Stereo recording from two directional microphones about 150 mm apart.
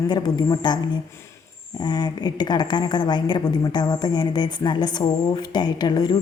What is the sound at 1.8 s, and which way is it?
A woman's voice, 30° left (ahead or behind).